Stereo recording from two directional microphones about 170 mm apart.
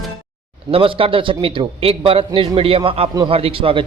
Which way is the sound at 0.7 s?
30° right (ahead or behind).